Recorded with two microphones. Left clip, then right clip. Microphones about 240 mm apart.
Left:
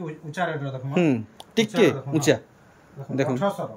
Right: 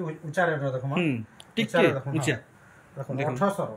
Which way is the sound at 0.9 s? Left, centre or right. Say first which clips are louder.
Left 5 dB; centre.